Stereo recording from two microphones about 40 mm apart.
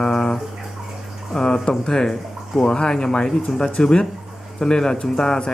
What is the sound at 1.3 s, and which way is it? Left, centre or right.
Speech, centre.